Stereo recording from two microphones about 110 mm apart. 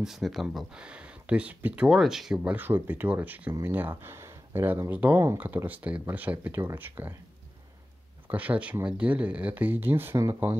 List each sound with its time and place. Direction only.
0.0 s speech: centre (ahead or behind)
1.9 s speech: 5° right (ahead or behind); by 7.2 s 20° right (ahead or behind)
8.3 s speech: 15° right (ahead or behind)